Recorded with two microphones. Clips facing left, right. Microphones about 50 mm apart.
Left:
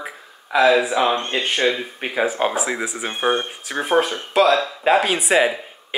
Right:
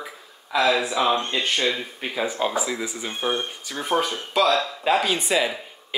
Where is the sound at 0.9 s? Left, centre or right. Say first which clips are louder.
Left 3 dB; left.